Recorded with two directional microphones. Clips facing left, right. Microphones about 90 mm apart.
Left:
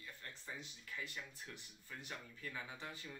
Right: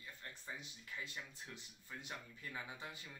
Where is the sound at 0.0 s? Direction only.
15° right (ahead or behind).